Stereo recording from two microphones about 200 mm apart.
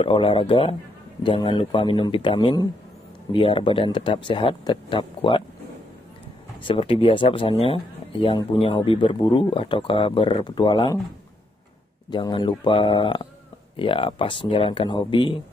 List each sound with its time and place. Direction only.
0.0 s speech: 25° left (ahead or behind)
6.6 s speech: 25° left (ahead or behind)
12.1 s speech: 20° left (ahead or behind)